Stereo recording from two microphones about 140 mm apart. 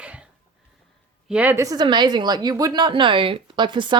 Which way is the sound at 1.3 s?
10° right (ahead or behind).